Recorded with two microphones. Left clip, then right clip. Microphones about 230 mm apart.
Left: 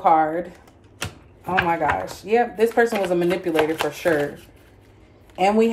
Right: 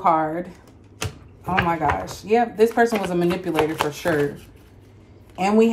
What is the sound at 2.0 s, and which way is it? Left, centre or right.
Speech, centre.